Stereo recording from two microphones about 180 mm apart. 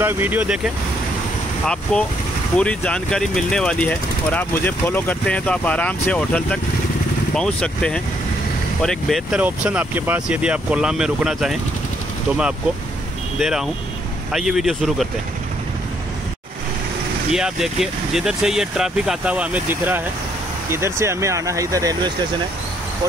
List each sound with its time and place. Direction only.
0.0 s speech: 10° right (ahead or behind)
1.7 s speech: 5° left (ahead or behind)
13.4 s speech: centre (ahead or behind)
17.3 s speech: 5° right (ahead or behind); by 22.1 s 20° right (ahead or behind)